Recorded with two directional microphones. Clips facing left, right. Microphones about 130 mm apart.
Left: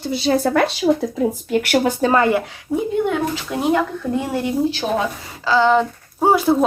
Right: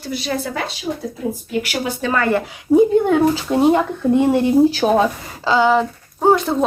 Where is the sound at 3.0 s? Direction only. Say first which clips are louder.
Right 6 dB; 30° right (ahead or behind).